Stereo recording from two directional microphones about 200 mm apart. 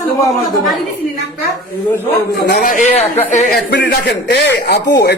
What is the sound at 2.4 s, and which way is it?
Speech, 55° left (ahead or behind).